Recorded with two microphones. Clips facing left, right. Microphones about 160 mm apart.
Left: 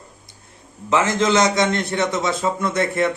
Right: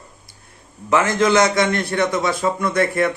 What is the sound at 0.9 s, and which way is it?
A man's voice, 25° left (ahead or behind).